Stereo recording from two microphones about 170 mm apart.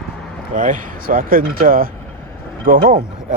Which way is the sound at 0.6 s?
50° right (ahead or behind).